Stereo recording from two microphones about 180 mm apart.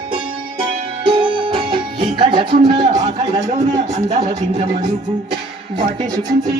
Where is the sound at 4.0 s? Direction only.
35° right (ahead or behind).